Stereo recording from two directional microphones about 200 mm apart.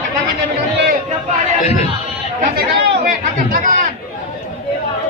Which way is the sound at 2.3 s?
50° right (ahead or behind).